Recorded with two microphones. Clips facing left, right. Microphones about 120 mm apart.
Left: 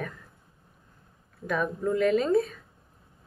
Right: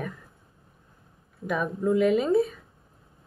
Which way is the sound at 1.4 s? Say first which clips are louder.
Right 2 dB; 10° right (ahead or behind).